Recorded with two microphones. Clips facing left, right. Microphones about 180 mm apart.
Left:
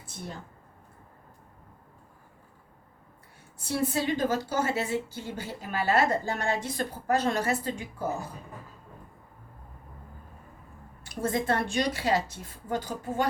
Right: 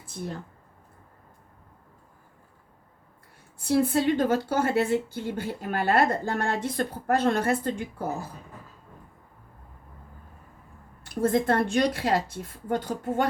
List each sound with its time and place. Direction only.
3.7 s a woman's voice: 55° right (ahead or behind)
11.0 s a woman's voice: 55° right (ahead or behind)